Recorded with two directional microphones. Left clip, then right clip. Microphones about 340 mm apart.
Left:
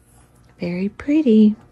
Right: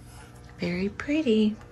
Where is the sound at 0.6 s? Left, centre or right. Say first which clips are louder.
Left 4 dB; centre.